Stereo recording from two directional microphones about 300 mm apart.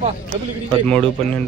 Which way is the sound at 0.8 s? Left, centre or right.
Centre.